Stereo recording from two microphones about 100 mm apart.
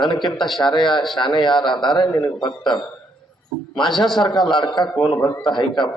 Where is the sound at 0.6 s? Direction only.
50° left (ahead or behind).